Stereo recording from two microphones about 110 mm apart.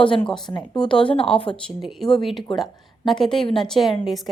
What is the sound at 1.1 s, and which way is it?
Speech, 55° left (ahead or behind).